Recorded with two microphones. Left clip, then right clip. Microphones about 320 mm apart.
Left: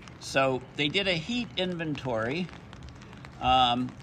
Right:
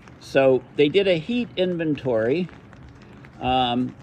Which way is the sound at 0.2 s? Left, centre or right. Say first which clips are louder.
Right 8 dB; left.